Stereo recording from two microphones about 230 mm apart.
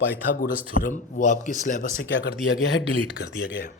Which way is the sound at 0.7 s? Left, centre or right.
Left.